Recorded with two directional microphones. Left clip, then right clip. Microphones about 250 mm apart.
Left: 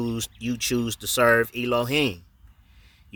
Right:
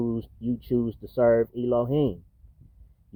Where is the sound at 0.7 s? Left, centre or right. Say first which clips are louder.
Right 1 dB; left.